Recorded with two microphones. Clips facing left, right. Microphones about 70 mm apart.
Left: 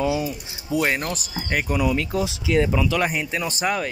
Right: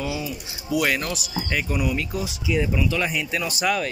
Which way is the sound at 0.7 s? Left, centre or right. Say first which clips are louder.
Even; left.